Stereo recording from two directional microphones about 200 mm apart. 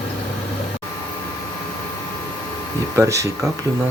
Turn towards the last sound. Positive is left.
turn(degrees=-15)  # may be behind; listen again after turning